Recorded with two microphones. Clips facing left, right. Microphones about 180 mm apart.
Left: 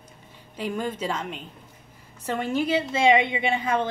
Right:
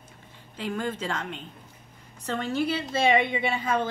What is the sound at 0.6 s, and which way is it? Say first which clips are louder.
A woman's voice: left 2 dB; 10° left (ahead or behind).